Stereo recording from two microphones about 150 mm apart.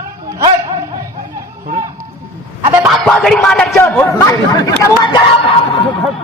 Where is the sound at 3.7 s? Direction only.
10° left (ahead or behind).